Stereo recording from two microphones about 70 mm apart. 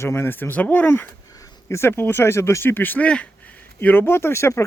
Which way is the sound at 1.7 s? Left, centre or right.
Left.